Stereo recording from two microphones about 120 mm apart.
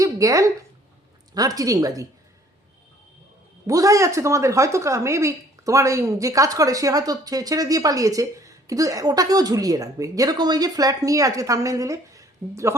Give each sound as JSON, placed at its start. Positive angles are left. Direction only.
{"t": 0.0, "sound": "a woman's voice", "side_deg": -25}
{"t": 3.7, "sound": "a woman's voice", "side_deg": -30}